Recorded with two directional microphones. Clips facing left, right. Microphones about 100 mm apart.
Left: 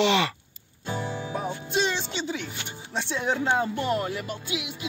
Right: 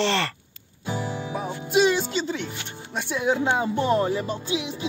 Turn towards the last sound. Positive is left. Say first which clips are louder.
# right 5 dB
turn(degrees=-30)  # may be behind; listen again after turning